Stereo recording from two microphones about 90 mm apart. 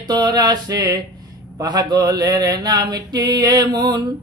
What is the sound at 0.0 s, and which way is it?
Mantra, 55° right (ahead or behind).